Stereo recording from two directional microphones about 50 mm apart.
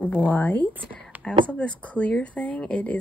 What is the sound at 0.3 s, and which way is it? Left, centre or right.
Speech, left.